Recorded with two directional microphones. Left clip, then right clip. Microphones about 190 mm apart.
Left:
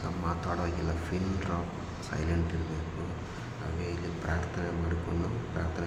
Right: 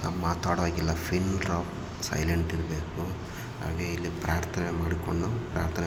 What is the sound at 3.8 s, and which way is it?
Speech, 20° right (ahead or behind).